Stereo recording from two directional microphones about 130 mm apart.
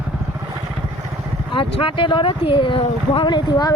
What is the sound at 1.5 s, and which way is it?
Speech, 45° left (ahead or behind).